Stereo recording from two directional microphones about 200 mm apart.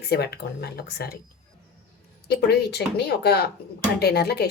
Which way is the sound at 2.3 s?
55° left (ahead or behind).